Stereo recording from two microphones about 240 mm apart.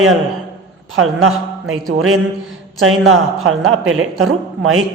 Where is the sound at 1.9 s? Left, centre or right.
Right.